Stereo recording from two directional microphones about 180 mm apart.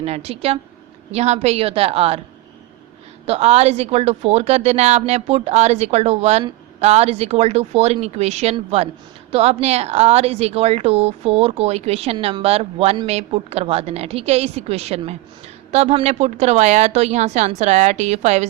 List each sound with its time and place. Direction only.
0.0 s speech: 35° right (ahead or behind)
3.2 s speech: 35° right (ahead or behind)